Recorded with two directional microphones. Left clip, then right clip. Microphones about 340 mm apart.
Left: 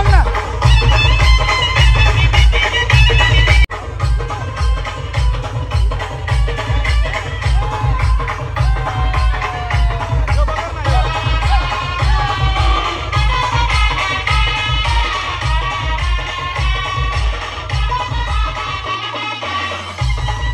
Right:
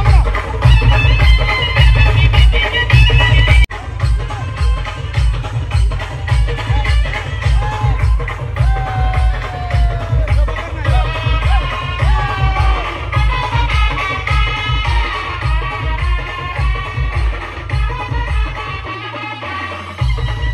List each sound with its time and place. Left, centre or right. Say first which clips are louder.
0.6 s music: left 2 dB; left
11.1 s music: left 2 dB; left
13.1 s music: left 1 dB; centre